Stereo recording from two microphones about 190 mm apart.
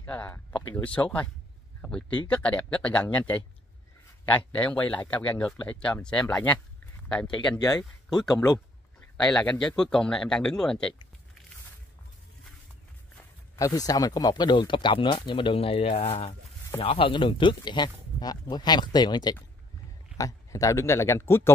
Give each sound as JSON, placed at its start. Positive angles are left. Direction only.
{"t": 0.0, "sound": "a sound", "side_deg": 10}
{"t": 0.8, "sound": "speech", "side_deg": 5}
{"t": 7.4, "sound": "speech", "side_deg": 20}
{"t": 8.2, "sound": "speech", "side_deg": 0}
{"t": 13.6, "sound": "speech", "side_deg": 20}